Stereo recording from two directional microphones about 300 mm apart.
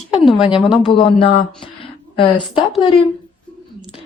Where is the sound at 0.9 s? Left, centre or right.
Centre.